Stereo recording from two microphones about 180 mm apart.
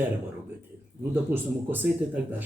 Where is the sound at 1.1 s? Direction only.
10° right (ahead or behind).